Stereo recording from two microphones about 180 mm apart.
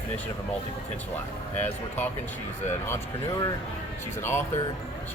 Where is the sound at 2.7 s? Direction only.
15° left (ahead or behind).